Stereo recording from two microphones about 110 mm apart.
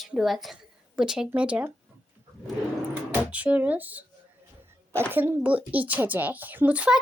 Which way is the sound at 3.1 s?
15° right (ahead or behind).